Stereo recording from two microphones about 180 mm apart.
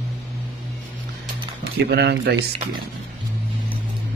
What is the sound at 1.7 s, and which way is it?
Speech, 65° right (ahead or behind).